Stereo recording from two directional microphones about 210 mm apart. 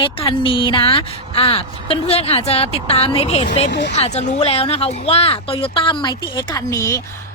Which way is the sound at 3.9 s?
30° left (ahead or behind).